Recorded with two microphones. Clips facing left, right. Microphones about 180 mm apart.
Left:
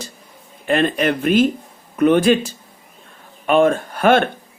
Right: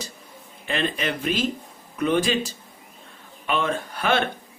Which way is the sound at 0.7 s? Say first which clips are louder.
Left 9 dB; 50° left (ahead or behind).